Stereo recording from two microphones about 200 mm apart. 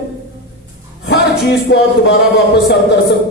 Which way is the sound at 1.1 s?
55° left (ahead or behind).